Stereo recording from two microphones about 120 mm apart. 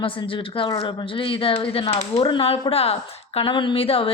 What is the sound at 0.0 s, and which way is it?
A man's voice, 45° left (ahead or behind).